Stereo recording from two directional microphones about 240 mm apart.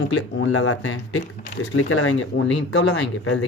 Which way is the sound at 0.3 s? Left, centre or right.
Left.